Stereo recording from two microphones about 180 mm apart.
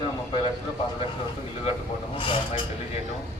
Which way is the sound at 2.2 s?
30° left (ahead or behind).